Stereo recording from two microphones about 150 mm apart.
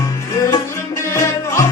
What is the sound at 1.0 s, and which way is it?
Music, 15° left (ahead or behind).